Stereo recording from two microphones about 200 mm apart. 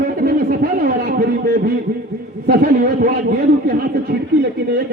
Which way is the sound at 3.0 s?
45° right (ahead or behind).